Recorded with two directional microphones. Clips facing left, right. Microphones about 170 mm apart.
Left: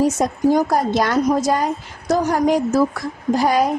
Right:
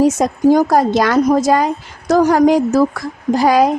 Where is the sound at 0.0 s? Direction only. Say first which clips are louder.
Right 4 dB; 90° right.